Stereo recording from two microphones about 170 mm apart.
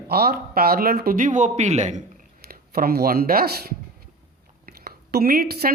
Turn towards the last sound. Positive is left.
turn(degrees=-60)  # may be behind; listen again after turning